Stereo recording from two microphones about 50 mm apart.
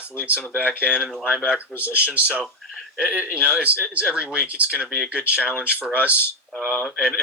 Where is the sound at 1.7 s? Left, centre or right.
Right; by 5.0 s centre.